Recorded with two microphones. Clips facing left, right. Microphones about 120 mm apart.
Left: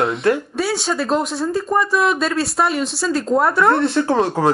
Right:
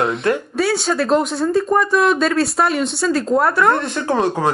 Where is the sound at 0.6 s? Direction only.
Centre (ahead or behind).